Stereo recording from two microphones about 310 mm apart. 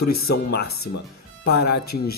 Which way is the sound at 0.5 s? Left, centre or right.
Left.